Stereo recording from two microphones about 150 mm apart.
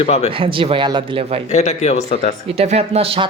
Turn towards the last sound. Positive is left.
turn(degrees=-40)  # may be behind; listen again after turning